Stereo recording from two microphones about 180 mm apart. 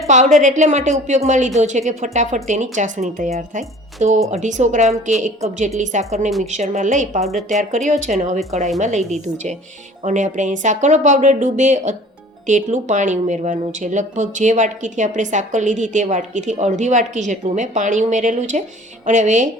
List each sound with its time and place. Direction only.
0.1 s a woman's voice: 40° right (ahead or behind)